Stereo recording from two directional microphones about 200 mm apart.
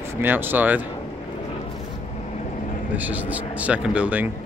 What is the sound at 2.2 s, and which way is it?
Vehicle, 35° left (ahead or behind).